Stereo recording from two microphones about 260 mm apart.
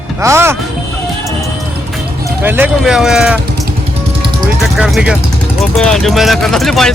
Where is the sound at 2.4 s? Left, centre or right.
Centre.